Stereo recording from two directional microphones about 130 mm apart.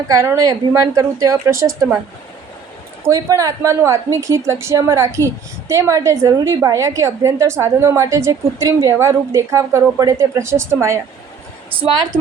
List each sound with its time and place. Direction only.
0.1 s a woman's voice: 25° right (ahead or behind)
3.1 s a woman's voice: 25° right (ahead or behind)